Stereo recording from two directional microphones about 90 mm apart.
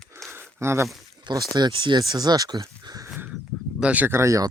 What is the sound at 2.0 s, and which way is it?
Speech, 50° right (ahead or behind).